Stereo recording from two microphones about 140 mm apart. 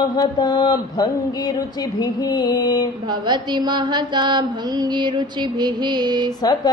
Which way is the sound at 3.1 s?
30° right (ahead or behind).